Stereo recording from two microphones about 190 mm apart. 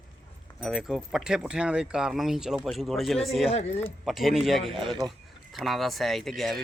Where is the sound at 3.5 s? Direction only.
35° left (ahead or behind).